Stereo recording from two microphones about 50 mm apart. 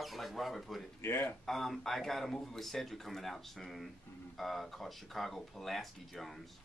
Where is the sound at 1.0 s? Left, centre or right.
Left.